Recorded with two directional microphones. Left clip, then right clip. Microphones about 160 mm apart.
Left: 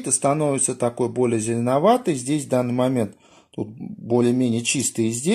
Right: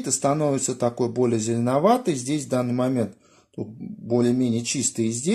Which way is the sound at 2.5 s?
20° left (ahead or behind).